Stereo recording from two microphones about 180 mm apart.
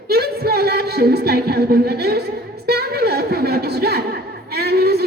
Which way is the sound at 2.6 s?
60° right (ahead or behind).